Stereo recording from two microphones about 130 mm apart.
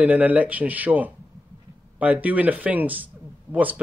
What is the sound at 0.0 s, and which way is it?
Speech, 10° right (ahead or behind).